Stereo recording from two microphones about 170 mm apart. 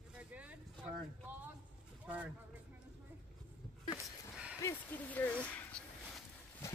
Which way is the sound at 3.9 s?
5° right (ahead or behind).